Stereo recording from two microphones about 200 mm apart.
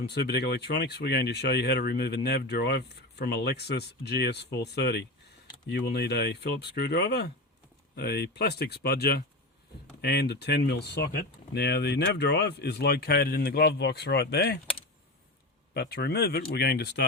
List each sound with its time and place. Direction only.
0.1 s speech: 55° left (ahead or behind)
15.7 s speech: 55° left (ahead or behind)